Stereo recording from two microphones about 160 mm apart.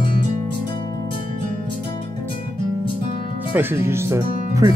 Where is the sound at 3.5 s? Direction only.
15° right (ahead or behind).